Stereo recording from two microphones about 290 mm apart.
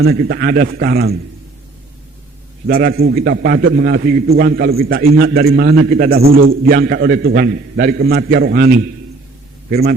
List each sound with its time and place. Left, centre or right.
0.0 s a man's voice: right
2.6 s a man's voice: right